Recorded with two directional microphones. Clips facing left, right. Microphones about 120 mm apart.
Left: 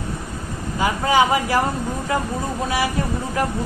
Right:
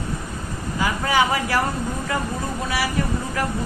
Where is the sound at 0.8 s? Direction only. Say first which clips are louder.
Left 3 dB; 20° left (ahead or behind).